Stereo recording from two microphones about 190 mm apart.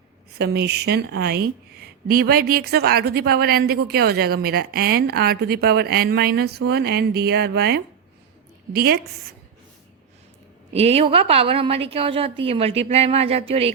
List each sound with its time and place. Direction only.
0.3 s a woman's voice: 60° right (ahead or behind)
10.7 s a woman's voice: 35° right (ahead or behind)